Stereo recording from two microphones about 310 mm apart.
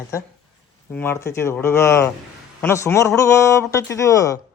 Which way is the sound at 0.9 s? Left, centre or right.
Centre.